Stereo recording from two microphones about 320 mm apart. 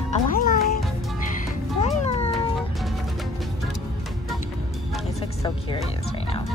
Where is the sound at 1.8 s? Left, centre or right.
Centre.